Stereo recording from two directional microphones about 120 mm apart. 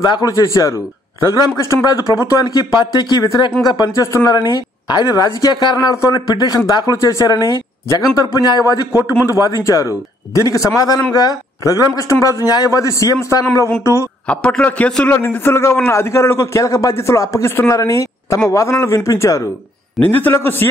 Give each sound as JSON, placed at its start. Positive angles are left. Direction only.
{"t": 0.0, "sound": "a man's voice", "side_deg": 30}
{"t": 14.2, "sound": "a man's voice", "side_deg": 10}